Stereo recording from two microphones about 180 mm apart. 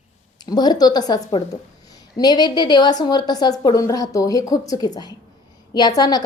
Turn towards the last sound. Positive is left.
turn(degrees=20)  # may be behind; listen again after turning